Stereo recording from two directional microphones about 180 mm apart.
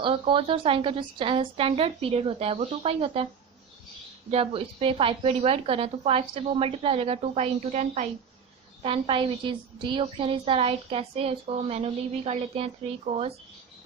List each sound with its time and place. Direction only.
0.0 s a woman's voice: 30° right (ahead or behind)
4.3 s a woman's voice: 30° right (ahead or behind)